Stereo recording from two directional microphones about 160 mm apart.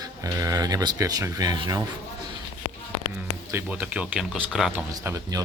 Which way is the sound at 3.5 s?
15° right (ahead or behind).